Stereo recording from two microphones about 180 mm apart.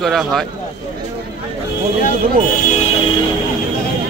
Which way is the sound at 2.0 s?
40° left (ahead or behind).